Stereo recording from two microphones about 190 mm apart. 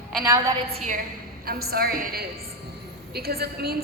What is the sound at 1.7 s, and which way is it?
A woman's voice, 55° right (ahead or behind).